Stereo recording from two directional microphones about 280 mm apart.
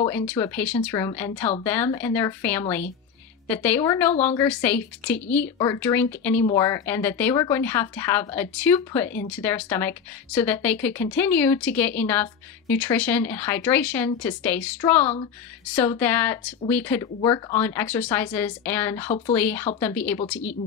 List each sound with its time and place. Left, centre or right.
0.0 s speech: centre
19.0 s speech: left
19.3 s speech: centre